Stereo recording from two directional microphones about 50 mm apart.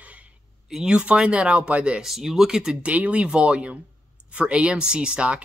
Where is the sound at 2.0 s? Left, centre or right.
Centre.